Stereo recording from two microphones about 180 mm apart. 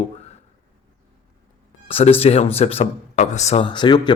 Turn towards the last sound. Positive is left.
turn(degrees=25)  # may be behind; listen again after turning